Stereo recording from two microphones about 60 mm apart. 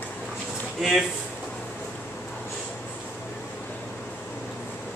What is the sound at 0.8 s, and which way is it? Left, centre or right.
Speech, centre.